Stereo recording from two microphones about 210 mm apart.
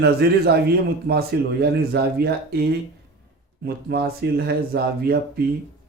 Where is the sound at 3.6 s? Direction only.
50° right (ahead or behind).